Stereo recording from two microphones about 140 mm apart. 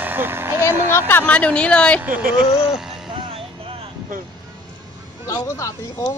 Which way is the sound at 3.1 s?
45° right (ahead or behind).